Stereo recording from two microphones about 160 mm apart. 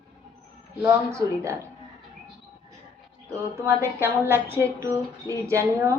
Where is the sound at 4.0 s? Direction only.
15° right (ahead or behind).